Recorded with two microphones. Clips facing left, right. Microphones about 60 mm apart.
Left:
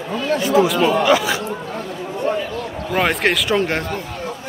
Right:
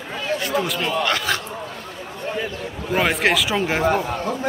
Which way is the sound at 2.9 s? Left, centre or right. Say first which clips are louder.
Left 1 dB; centre.